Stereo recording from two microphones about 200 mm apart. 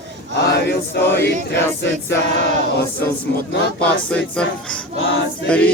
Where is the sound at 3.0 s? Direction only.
10° left (ahead or behind).